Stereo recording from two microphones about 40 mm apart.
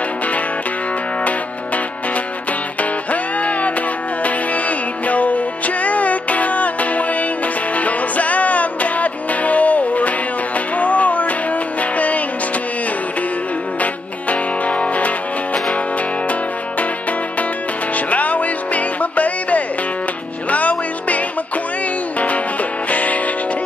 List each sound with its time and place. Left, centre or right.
2.8 s music: left
14.3 s music: left
17.9 s music: left
22.8 s music: left